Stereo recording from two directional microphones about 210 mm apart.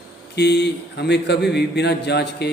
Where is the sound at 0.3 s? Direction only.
50° left (ahead or behind).